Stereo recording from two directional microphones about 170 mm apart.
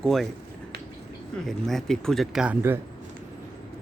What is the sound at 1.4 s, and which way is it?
Speech, centre (ahead or behind).